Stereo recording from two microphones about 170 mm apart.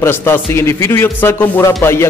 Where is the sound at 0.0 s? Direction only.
15° left (ahead or behind).